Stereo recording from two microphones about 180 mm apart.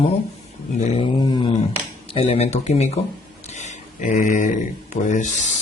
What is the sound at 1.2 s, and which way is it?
Speech, 25° left (ahead or behind).